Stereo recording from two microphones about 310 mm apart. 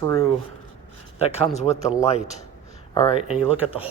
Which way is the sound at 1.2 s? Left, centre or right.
Centre.